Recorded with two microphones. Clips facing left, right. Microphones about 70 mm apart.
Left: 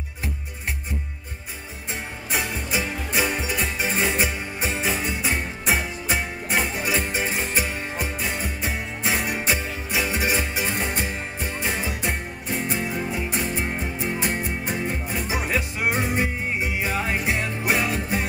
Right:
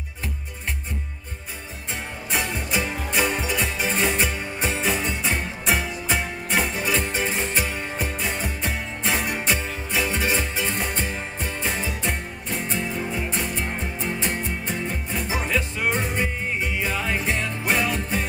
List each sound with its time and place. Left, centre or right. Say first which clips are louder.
2.3 s music: right 1 dB; centre; by 17.2 s left
17.2 s music: left 1 dB; centre